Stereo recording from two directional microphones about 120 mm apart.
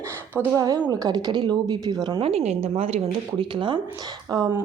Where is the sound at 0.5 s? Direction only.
30° right (ahead or behind).